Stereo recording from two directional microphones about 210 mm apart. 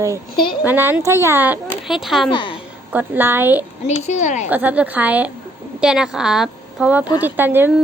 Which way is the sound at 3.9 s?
35° left (ahead or behind).